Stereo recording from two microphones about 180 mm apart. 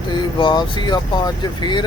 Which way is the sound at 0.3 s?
25° left (ahead or behind).